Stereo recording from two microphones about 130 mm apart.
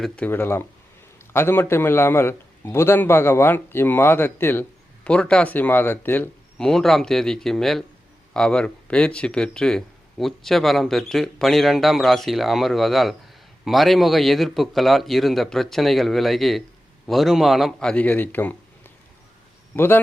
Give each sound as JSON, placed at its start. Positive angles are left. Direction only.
{"t": 0.3, "sound": "a man's voice", "side_deg": 15}
{"t": 6.6, "sound": "speech", "side_deg": 5}